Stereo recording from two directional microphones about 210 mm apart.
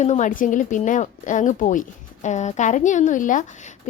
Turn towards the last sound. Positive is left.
turn(degrees=40)  # may be behind; listen again after turning